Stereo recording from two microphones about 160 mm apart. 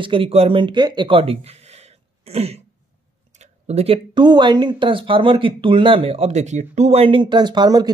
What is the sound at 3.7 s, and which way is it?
Speech, 40° right (ahead or behind).